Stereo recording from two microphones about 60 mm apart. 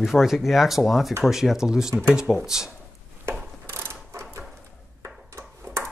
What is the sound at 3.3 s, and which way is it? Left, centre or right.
Mechanisms, right.